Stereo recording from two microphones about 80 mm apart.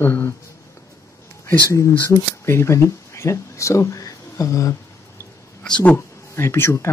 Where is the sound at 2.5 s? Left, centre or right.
Left.